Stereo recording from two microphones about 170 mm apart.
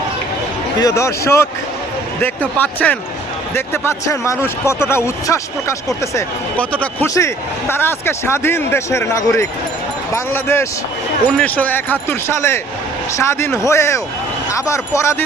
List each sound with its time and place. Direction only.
0.8 s speech: 20° left (ahead or behind)